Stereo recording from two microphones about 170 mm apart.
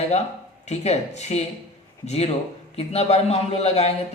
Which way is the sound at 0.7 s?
40° left (ahead or behind).